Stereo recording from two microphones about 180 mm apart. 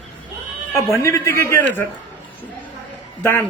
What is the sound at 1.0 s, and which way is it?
Speech, 15° left (ahead or behind).